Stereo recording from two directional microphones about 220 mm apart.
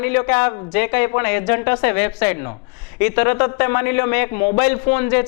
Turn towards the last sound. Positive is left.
turn(degrees=10)  # may be behind; listen again after turning